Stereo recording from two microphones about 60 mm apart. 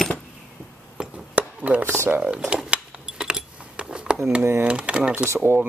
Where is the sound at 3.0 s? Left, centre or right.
Centre.